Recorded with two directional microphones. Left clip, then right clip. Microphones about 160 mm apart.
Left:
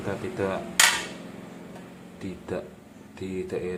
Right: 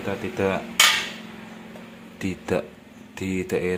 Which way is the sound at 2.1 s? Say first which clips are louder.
Right 8 dB; 40° right (ahead or behind).